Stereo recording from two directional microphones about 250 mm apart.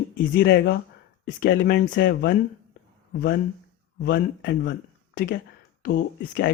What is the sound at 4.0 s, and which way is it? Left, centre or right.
Speech, left.